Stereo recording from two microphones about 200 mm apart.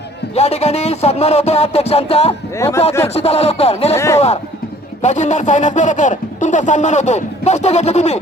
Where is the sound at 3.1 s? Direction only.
30° left (ahead or behind).